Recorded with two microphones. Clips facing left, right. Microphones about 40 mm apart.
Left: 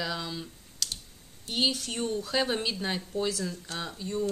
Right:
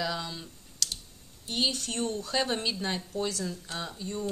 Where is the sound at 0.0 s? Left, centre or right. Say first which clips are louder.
Even; centre.